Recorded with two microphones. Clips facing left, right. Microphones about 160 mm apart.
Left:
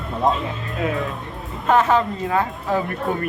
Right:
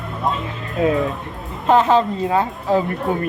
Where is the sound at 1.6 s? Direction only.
20° right (ahead or behind).